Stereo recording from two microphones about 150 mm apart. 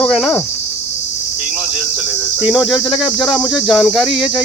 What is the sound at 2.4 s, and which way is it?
Speech, 5° right (ahead or behind).